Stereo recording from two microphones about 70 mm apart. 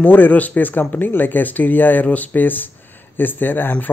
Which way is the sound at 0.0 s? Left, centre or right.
Left.